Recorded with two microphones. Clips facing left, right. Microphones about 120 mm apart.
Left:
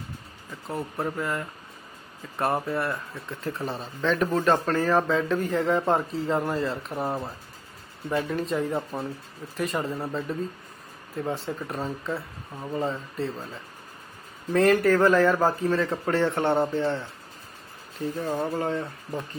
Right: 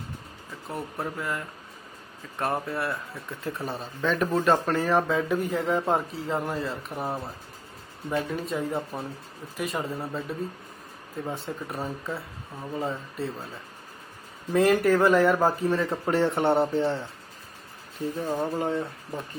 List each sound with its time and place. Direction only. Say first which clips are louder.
0.7 s speech: left 3 dB; centre (ahead or behind)
14.5 s a man's voice: left 1 dB; 5° right (ahead or behind)
18.6 s speech: even; 5° right (ahead or behind)